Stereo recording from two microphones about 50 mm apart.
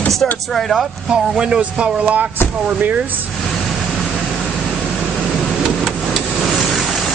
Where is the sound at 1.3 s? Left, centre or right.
Centre.